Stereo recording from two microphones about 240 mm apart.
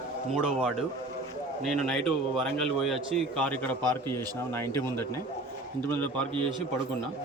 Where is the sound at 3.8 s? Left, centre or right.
Centre.